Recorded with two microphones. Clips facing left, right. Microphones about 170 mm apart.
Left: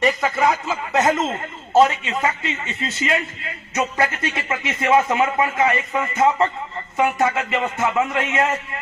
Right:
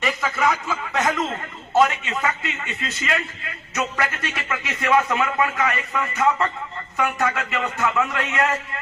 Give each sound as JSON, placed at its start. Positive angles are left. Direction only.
{"t": 0.0, "sound": "speech", "side_deg": 30}